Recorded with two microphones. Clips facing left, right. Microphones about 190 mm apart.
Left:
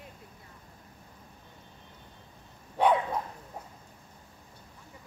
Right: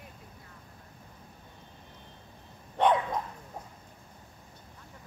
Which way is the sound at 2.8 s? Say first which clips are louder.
Even; 10° left (ahead or behind).